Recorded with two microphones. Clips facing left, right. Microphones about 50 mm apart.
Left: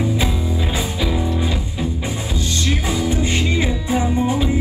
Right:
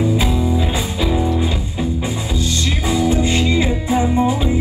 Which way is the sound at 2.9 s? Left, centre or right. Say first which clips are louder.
Right 7 dB; right.